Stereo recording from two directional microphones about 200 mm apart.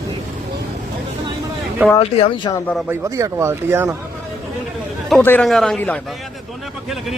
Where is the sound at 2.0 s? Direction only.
30° left (ahead or behind).